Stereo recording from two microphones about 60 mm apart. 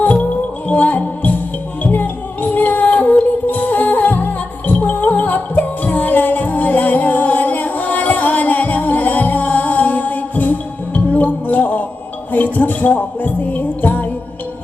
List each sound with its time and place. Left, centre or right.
0.0 s music: left